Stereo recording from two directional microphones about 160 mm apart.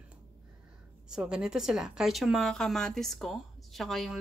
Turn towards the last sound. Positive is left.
turn(degrees=0)  # may be behind; listen again after turning